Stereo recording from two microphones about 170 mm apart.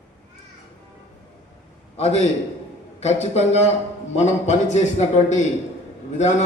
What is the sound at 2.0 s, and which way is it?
A man's voice, 40° left (ahead or behind).